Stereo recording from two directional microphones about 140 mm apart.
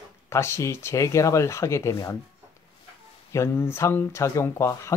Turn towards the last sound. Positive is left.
turn(degrees=20)  # may be behind; listen again after turning